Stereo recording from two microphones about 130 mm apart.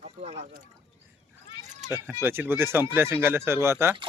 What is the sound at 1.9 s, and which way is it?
Speech, 20° right (ahead or behind).